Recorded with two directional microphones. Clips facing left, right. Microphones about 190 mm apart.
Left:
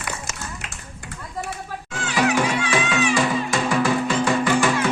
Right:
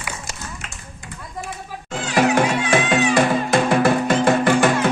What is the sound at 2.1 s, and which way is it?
Music, 50° right (ahead or behind).